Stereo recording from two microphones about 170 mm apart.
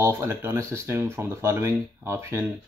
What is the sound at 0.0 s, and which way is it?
Speech, 15° right (ahead or behind).